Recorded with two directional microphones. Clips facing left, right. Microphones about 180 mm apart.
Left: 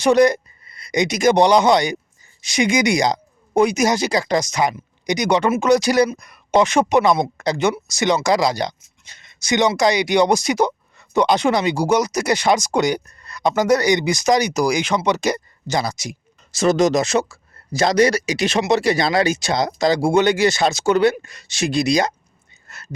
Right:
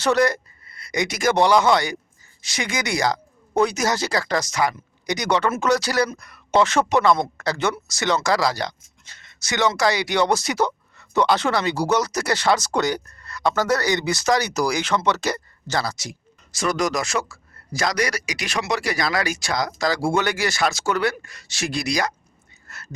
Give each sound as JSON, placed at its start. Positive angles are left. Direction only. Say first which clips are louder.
{"t": 0.0, "sound": "speech", "louder": "left 5 dB", "side_deg": 15}
{"t": 16.5, "sound": "speech", "louder": "left 7 dB", "side_deg": 25}
{"t": 22.6, "sound": "a sound", "louder": "left 4 dB", "side_deg": 20}